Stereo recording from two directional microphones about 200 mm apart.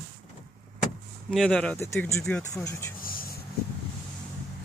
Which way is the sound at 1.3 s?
5° left (ahead or behind).